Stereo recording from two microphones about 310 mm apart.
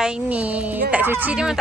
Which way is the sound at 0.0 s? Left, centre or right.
Centre.